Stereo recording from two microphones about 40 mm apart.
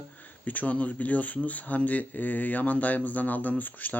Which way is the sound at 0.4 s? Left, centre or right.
Left.